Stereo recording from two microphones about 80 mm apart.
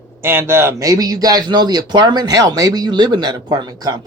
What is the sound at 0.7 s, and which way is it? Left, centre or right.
Speech, right.